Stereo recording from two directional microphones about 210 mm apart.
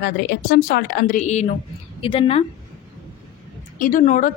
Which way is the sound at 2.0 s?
25° left (ahead or behind).